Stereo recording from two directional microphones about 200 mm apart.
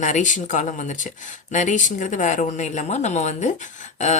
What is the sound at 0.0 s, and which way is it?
Speech, 40° left (ahead or behind).